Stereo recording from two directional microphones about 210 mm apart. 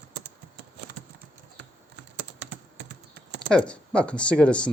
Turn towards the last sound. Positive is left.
turn(degrees=5)  # may be behind; listen again after turning